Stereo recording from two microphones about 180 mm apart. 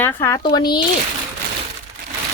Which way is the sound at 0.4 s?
25° left (ahead or behind).